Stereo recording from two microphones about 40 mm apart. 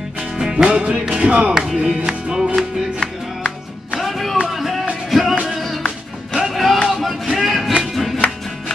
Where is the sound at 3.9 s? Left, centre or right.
Centre.